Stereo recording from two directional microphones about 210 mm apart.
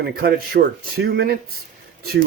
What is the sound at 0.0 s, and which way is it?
Speech, 50° right (ahead or behind).